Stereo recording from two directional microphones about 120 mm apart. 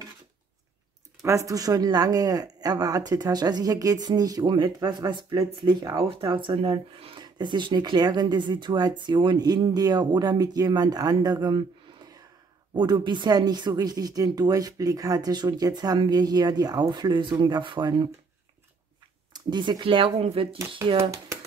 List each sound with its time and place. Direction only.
1.2 s speech: 25° right (ahead or behind)
19.3 s speech: 35° right (ahead or behind)